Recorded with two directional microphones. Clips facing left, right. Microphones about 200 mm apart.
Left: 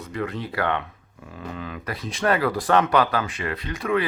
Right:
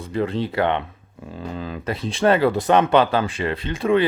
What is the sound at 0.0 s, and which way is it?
Speech, 30° right (ahead or behind).